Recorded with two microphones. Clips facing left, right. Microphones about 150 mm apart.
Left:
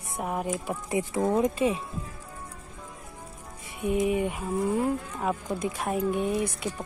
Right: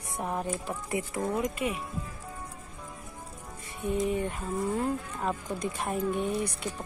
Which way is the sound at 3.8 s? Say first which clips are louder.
Left 3 dB; 15° left (ahead or behind).